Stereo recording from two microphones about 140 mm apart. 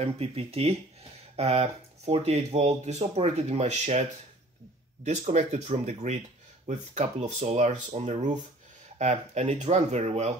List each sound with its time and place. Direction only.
0.0 s speech: 45° right (ahead or behind)